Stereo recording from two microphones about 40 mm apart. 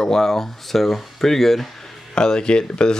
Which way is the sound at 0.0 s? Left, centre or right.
Centre.